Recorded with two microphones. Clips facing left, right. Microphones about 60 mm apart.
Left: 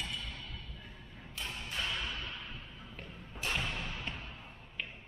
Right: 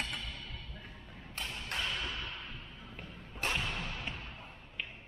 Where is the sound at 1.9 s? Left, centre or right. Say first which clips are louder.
Even; centre.